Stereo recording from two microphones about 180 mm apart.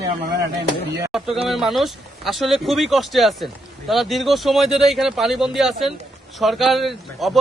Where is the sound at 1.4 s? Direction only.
Centre (ahead or behind).